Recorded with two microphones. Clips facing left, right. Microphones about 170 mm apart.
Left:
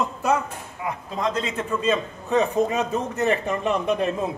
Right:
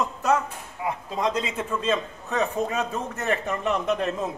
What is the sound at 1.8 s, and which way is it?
A man's voice, 10° left (ahead or behind).